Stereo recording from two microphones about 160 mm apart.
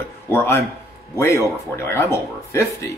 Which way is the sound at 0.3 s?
15° left (ahead or behind).